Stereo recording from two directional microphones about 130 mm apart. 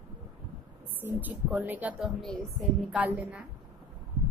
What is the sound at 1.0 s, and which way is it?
Speech, 15° right (ahead or behind).